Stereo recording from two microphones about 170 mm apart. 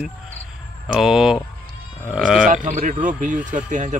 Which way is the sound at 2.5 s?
45° right (ahead or behind).